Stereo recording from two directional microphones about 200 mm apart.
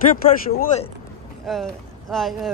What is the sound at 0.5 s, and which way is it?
Speech, 45° left (ahead or behind).